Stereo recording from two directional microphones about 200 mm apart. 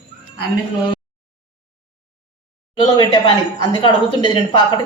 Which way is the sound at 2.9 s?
20° left (ahead or behind).